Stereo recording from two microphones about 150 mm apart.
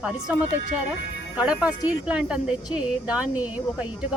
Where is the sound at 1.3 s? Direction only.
5° right (ahead or behind).